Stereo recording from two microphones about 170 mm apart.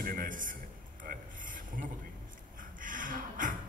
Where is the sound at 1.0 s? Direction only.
50° right (ahead or behind).